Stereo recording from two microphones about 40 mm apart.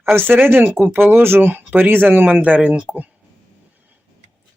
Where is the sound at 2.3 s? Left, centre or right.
Right.